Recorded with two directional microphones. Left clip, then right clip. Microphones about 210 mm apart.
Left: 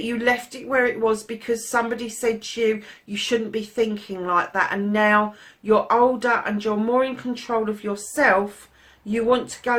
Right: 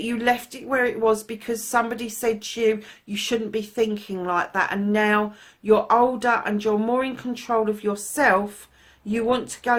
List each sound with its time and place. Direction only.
0.0 s a woman's voice: 40° right (ahead or behind)